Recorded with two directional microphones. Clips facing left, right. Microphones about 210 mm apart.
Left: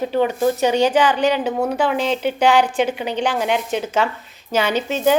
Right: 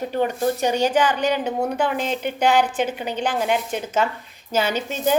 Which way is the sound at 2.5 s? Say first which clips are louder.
Left 3 dB; 10° left (ahead or behind).